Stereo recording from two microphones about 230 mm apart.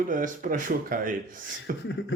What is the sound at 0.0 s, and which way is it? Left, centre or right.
Speech, right.